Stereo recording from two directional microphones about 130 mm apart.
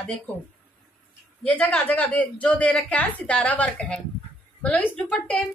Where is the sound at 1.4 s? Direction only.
10° left (ahead or behind).